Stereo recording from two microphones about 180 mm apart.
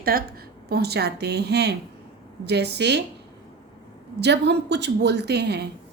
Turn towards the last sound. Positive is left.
turn(degrees=-65)  # may be behind; listen again after turning